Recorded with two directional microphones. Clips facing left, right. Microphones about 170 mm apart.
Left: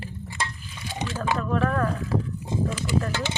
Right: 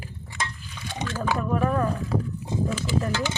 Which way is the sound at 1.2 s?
15° right (ahead or behind).